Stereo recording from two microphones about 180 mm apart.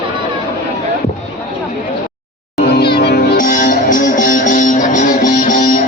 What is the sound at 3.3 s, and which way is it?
Music, 45° left (ahead or behind).